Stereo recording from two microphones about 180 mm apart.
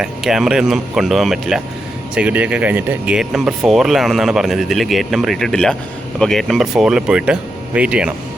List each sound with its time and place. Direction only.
0.0 s speech: 5° right (ahead or behind)